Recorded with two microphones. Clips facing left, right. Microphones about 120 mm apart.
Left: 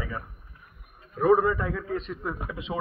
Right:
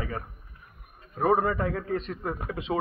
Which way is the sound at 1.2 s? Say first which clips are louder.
Left 2 dB; 45° right (ahead or behind).